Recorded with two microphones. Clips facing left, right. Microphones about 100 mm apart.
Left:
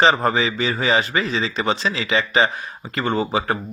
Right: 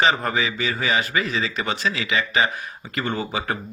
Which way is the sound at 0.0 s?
30° left (ahead or behind).